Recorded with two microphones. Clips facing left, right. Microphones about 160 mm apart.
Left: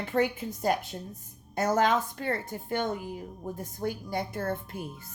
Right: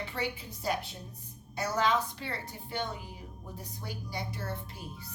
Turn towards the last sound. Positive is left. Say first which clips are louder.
# left 6 dB
turn(degrees=50)  # may be behind; listen again after turning